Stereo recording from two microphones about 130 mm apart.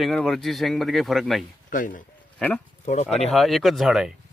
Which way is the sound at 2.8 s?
60° left (ahead or behind).